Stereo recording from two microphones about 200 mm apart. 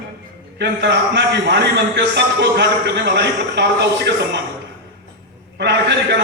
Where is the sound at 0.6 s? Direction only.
60° right (ahead or behind).